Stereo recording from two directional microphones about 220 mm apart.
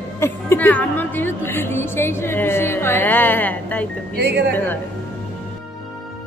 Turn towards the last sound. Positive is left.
turn(degrees=10)  # may be behind; listen again after turning